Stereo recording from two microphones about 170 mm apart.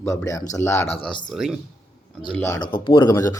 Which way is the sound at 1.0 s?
30° left (ahead or behind).